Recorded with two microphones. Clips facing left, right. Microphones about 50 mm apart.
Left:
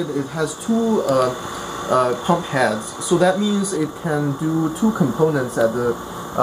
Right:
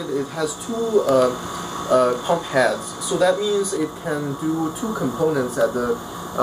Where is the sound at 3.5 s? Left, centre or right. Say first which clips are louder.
Even; centre.